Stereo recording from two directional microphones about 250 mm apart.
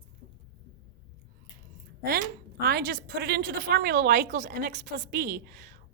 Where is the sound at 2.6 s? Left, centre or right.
Right.